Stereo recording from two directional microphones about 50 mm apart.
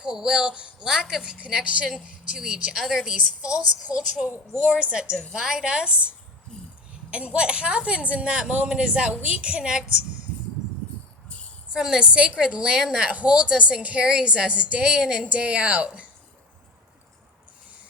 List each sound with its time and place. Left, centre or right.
0.0 s speech: centre
6.5 s a sound: centre
7.1 s speech: right
11.7 s speech: centre
13.1 s speech: right